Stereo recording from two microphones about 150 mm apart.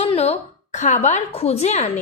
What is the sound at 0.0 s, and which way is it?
A woman's voice, 45° left (ahead or behind).